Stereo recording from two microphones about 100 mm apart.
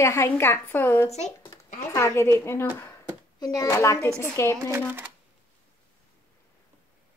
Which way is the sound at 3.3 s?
35° left (ahead or behind).